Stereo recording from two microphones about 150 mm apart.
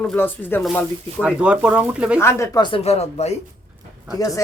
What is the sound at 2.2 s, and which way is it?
Speech, 15° left (ahead or behind).